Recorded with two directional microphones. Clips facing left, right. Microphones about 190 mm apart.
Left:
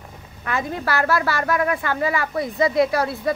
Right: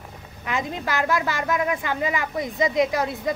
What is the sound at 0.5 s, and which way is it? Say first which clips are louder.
A woman's voice: left 2 dB; 15° right (ahead or behind).